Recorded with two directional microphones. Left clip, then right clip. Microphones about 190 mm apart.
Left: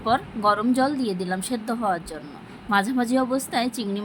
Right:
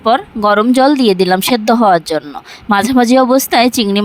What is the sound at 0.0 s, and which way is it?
Speech, 45° right (ahead or behind).